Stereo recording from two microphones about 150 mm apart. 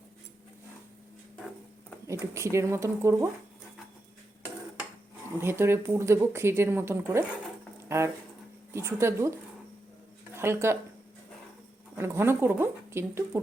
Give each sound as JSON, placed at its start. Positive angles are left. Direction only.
{"t": 2.0, "sound": "speech", "side_deg": -20}
{"t": 5.4, "sound": "speech", "side_deg": -15}
{"t": 11.9, "sound": "speech", "side_deg": -15}